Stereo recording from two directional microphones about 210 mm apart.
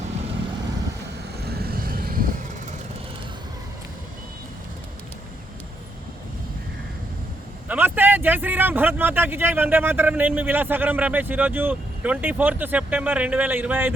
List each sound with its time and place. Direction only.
1.4 s vehicle: 50° right (ahead or behind)
7.7 s speech: 10° right (ahead or behind)